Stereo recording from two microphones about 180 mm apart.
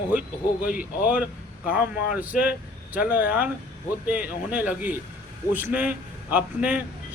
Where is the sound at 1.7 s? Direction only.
10° right (ahead or behind).